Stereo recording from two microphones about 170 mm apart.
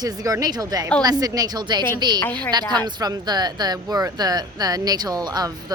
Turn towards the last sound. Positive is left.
turn(degrees=-25)  # may be behind; listen again after turning